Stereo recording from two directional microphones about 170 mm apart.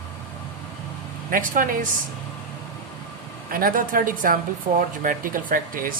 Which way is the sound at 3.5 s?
55° right (ahead or behind).